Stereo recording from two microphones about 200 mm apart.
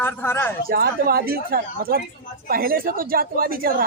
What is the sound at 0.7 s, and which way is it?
A woman's voice, 50° right (ahead or behind).